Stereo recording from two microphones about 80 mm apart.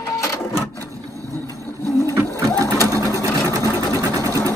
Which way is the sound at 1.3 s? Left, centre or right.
Left.